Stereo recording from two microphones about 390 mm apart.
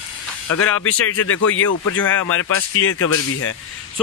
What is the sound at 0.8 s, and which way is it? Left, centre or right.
Speech, left.